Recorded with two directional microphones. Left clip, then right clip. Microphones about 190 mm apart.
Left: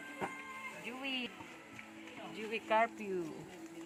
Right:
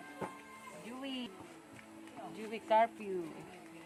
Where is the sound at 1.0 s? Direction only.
15° right (ahead or behind).